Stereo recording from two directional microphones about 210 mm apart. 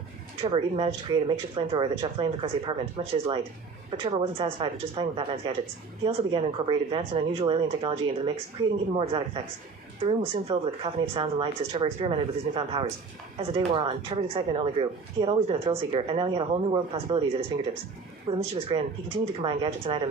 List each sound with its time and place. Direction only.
0.4 s speech: 25° right (ahead or behind)